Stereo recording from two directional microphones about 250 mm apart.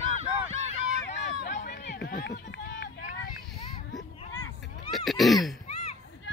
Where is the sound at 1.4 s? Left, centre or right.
Left.